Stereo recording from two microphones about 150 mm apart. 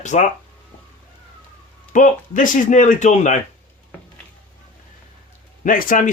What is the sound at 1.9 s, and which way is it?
Speech, 60° left (ahead or behind).